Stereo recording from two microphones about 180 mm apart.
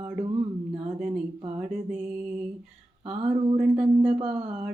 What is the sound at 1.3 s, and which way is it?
Speech, 30° right (ahead or behind).